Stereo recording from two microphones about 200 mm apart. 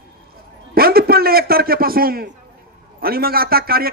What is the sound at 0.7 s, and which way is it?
Speech, 50° right (ahead or behind).